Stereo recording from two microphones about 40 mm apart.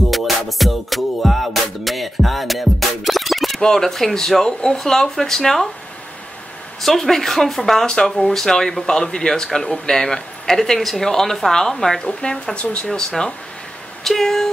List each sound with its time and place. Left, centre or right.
0.1 s music: centre
3.6 s speech: centre
6.8 s speech: centre
14.0 s speech: centre